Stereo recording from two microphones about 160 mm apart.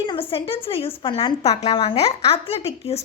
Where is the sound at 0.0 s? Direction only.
30° left (ahead or behind).